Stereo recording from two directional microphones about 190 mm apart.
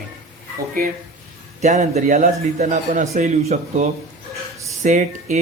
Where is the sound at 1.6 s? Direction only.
35° right (ahead or behind).